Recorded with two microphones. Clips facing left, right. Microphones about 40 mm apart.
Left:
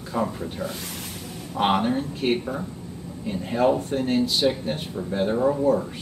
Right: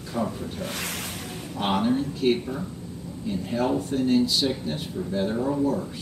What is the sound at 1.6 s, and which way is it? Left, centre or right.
Speech, left.